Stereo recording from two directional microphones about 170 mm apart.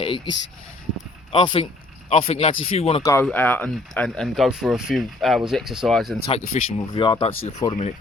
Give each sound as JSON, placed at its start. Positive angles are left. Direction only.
{"t": 0.0, "sound": "speech", "side_deg": 30}
{"t": 3.0, "sound": "speech", "side_deg": 15}
{"t": 6.2, "sound": "speech", "side_deg": 40}
{"t": 6.7, "sound": "speech", "side_deg": 30}